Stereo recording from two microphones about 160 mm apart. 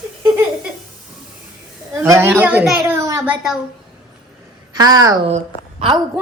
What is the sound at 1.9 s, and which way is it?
A child's voice, 20° right (ahead or behind).